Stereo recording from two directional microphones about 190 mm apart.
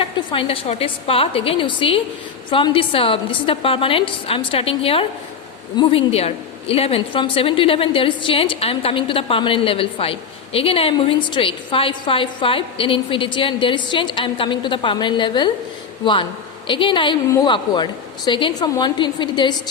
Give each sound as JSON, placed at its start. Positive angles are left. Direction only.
{"t": 0.0, "sound": "a woman's voice", "side_deg": 30}
{"t": 16.6, "sound": "a woman's voice", "side_deg": 25}